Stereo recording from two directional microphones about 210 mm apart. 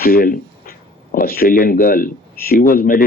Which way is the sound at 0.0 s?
45° left (ahead or behind).